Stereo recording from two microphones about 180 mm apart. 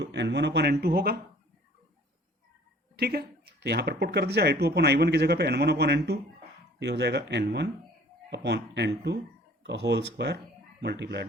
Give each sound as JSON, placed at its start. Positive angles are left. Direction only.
{"t": 0.0, "sound": "speech", "side_deg": -75}
{"t": 2.9, "sound": "speech", "side_deg": -60}